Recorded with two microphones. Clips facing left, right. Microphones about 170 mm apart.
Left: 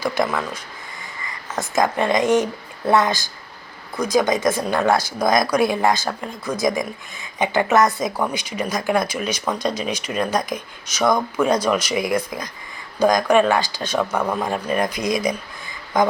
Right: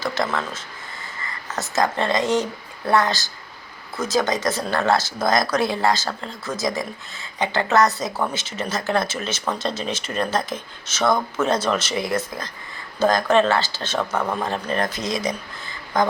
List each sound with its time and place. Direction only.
0.0 s speech: 15° left (ahead or behind)
15.0 s speech: 25° right (ahead or behind)
15.9 s speech: 20° left (ahead or behind)